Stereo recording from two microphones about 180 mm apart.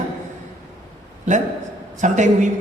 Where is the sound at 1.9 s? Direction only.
40° right (ahead or behind).